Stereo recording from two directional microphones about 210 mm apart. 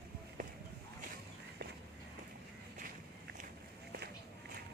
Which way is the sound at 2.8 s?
40° right (ahead or behind).